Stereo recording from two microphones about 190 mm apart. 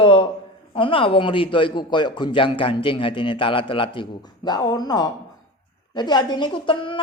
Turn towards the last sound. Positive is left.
turn(degrees=25)  # may be behind; listen again after turning